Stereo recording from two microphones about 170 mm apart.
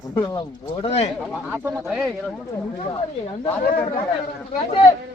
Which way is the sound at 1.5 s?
10° right (ahead or behind).